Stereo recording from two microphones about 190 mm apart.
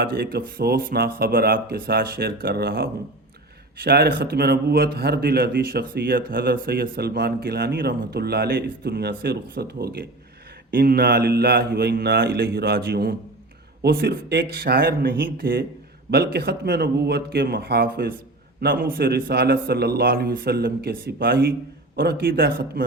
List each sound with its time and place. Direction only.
0.0 s a man's voice: 55° right (ahead or behind)